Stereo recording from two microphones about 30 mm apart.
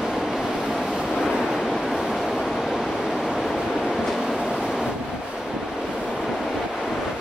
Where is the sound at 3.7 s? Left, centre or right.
Centre.